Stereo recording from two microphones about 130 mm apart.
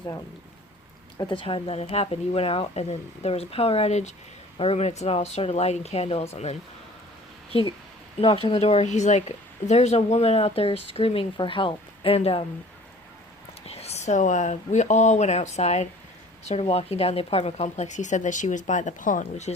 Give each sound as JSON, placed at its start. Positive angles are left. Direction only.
{"t": 1.3, "sound": "a woman's voice", "side_deg": 40}
{"t": 8.2, "sound": "a woman's voice", "side_deg": 45}
{"t": 13.7, "sound": "speech", "side_deg": 50}